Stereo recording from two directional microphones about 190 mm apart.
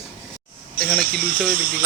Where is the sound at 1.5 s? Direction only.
45° right (ahead or behind).